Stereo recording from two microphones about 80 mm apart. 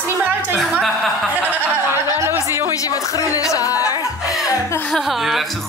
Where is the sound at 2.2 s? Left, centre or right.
Right.